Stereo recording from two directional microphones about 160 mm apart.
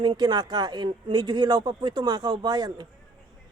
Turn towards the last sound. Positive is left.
turn(degrees=-25)  # may be behind; listen again after turning